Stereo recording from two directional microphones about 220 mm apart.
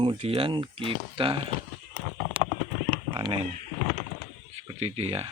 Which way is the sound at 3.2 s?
25° right (ahead or behind).